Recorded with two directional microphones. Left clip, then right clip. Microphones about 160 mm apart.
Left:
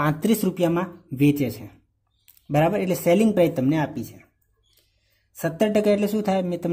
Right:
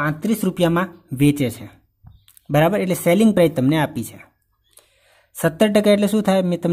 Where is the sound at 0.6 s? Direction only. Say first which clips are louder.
Right 4 dB; 30° right (ahead or behind).